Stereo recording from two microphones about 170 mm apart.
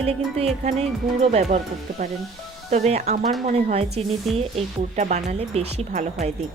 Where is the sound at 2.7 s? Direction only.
40° right (ahead or behind).